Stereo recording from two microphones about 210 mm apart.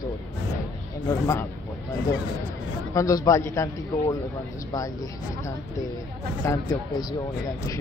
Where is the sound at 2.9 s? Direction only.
15° left (ahead or behind).